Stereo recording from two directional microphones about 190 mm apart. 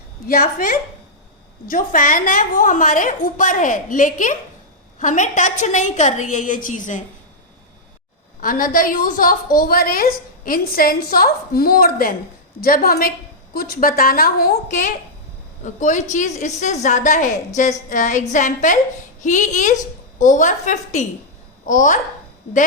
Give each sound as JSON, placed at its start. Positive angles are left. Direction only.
{"t": 0.3, "sound": "a woman's voice", "side_deg": 50}
{"t": 8.4, "sound": "a woman's voice", "side_deg": 50}